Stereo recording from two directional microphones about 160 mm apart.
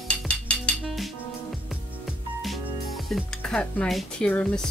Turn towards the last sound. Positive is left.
turn(degrees=5)  # may be behind; listen again after turning